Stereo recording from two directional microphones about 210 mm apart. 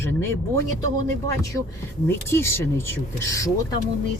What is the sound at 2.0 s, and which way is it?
Speech, 10° left (ahead or behind).